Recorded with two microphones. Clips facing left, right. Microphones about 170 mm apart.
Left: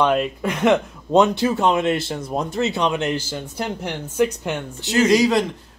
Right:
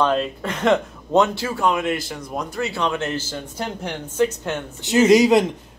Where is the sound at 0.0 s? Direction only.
10° left (ahead or behind).